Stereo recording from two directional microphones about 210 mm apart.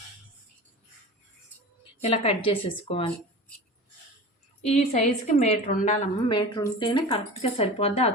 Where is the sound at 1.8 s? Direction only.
25° left (ahead or behind).